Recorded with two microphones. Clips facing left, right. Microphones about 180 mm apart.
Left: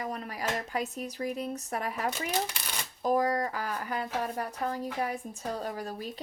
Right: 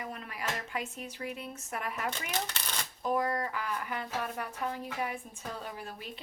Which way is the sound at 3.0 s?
35° left (ahead or behind).